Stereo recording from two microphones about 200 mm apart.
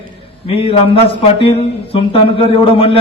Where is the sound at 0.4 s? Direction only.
30° left (ahead or behind).